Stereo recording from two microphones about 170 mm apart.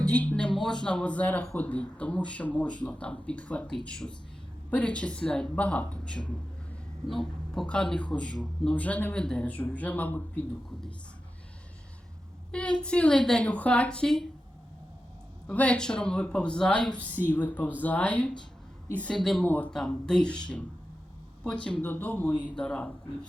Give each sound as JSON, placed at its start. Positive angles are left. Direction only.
{"t": 0.0, "sound": "a man's voice", "side_deg": 5}
{"t": 12.5, "sound": "a woman's voice", "side_deg": 5}
{"t": 15.4, "sound": "a woman's voice", "side_deg": 5}